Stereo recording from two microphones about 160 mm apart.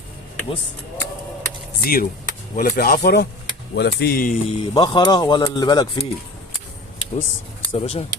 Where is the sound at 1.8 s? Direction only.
65° left (ahead or behind).